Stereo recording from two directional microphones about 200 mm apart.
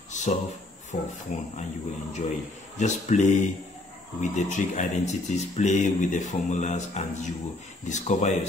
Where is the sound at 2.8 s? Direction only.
35° left (ahead or behind).